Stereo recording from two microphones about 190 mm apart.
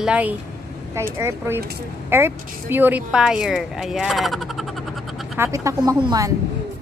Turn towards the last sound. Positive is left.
turn(degrees=-20)  # may be behind; listen again after turning